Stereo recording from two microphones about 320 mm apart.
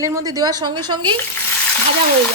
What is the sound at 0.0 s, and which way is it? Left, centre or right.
A woman's voice, centre.